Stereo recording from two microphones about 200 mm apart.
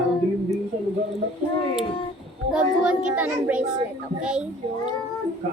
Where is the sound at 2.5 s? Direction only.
5° right (ahead or behind).